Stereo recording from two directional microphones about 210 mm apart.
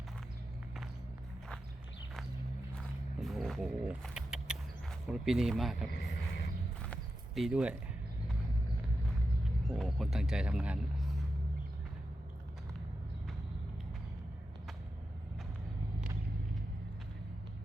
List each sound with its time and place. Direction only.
2.7 s a sound: centre (ahead or behind)
5.9 s speech: 50° left (ahead or behind)
6.8 s clip-clop: centre (ahead or behind)
9.6 s speech: centre (ahead or behind)